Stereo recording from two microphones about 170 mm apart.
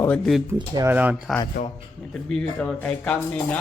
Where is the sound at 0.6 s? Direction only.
20° right (ahead or behind).